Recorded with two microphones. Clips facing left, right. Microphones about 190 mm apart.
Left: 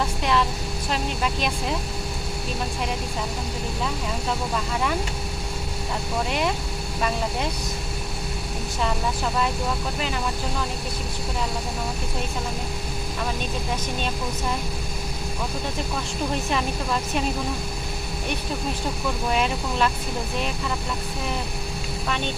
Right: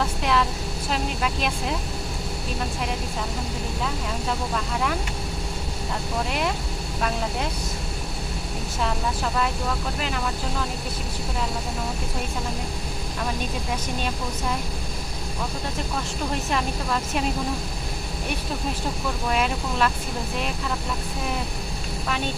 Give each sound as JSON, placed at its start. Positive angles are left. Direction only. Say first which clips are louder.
{"t": 0.0, "sound": "vehicle", "louder": "even", "side_deg": 0}
{"t": 0.9, "sound": "speech", "louder": "even", "side_deg": 0}
{"t": 3.8, "sound": "speech", "louder": "even", "side_deg": 0}
{"t": 8.8, "sound": "speech", "louder": "left 1 dB", "side_deg": 0}
{"t": 16.3, "sound": "speech", "louder": "even", "side_deg": 0}
{"t": 19.3, "sound": "speech", "louder": "even", "side_deg": 0}